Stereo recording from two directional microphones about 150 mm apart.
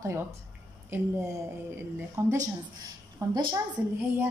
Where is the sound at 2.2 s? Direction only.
15° right (ahead or behind).